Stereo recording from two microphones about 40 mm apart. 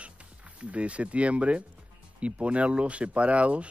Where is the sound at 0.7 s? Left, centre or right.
Right.